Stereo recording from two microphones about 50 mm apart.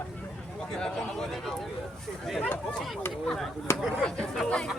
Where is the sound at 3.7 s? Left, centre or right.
Left.